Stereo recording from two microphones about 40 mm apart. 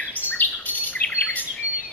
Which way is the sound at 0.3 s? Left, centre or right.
Left.